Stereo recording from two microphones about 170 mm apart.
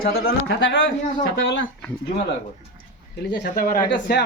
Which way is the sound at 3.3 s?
60° left (ahead or behind).